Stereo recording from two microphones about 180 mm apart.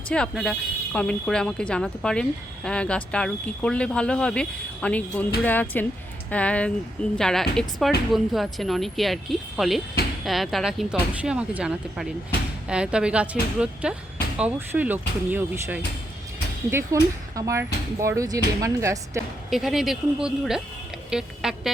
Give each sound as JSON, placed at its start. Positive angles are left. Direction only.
{"t": 0.1, "sound": "speech", "side_deg": 5}
{"t": 19.5, "sound": "speech", "side_deg": 0}
{"t": 21.1, "sound": "music", "side_deg": -5}